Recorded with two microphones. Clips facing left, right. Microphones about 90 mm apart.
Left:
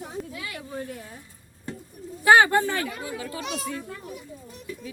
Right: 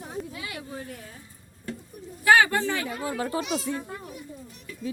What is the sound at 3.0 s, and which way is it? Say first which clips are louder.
Speech: right 5 dB; 45° right (ahead or behind).